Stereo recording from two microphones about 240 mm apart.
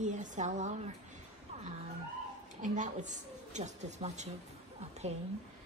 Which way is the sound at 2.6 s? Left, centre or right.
Right.